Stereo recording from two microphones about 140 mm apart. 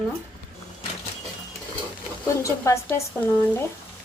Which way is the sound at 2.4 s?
20° left (ahead or behind).